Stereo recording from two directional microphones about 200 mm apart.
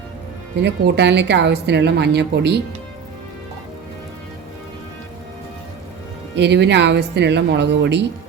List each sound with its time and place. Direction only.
0.6 s a woman's voice: 60° right (ahead or behind)
6.3 s a woman's voice: 60° right (ahead or behind)